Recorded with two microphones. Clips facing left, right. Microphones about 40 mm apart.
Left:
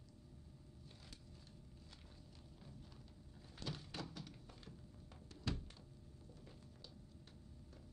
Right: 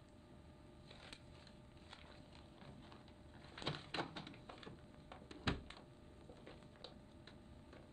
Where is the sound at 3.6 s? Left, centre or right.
Right.